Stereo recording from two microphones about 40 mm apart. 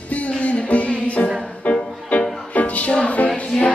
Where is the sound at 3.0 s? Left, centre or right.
Left.